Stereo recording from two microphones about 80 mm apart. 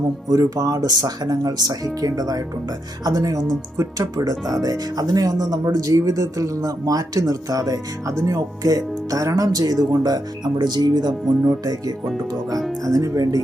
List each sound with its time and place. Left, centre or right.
0.3 s speech: right